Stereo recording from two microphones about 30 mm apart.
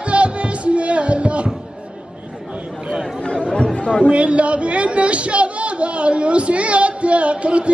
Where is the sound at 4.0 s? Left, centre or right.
Right.